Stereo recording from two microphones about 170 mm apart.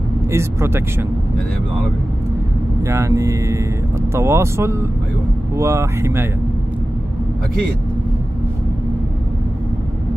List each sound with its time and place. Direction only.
0.3 s speech: 15° right (ahead or behind)
2.8 s speech: 15° right (ahead or behind)